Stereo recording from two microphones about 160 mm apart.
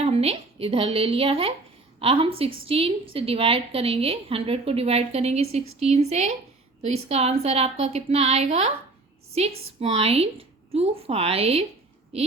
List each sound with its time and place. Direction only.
0.0 s a woman's voice: 40° right (ahead or behind)
9.8 s a woman's voice: 40° right (ahead or behind)